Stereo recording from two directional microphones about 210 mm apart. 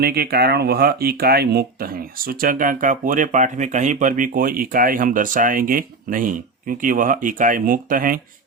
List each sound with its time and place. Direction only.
0.0 s speech: 45° right (ahead or behind)